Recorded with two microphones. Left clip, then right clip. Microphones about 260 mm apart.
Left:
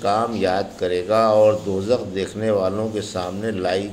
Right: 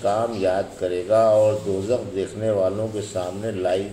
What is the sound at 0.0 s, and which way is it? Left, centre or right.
Speech, left.